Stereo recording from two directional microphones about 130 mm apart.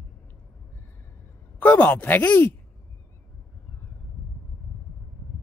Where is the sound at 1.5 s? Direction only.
10° left (ahead or behind).